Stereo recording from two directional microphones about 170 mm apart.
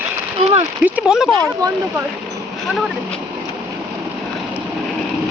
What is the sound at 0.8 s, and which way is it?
Speech, 5° right (ahead or behind).